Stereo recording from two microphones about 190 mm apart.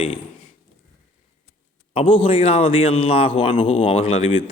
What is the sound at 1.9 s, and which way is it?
A man's voice, 30° left (ahead or behind).